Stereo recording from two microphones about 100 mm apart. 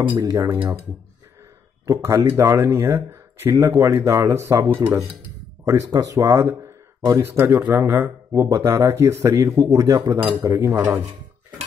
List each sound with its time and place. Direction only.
0.2 s speech: 30° right (ahead or behind)
1.9 s speech: 30° right (ahead or behind)
8.3 s speech: 35° right (ahead or behind)
10.4 s speech: 25° right (ahead or behind)